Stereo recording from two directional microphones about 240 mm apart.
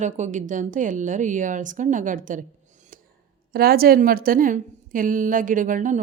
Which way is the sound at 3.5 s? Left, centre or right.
Right.